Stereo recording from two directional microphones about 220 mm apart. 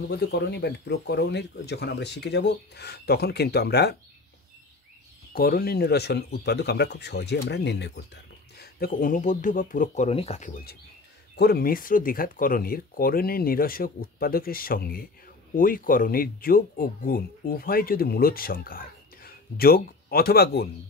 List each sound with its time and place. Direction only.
0.1 s speech: 50° left (ahead or behind)
5.3 s speech: 45° left (ahead or behind)